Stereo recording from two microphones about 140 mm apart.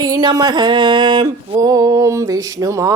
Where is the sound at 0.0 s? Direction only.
30° right (ahead or behind).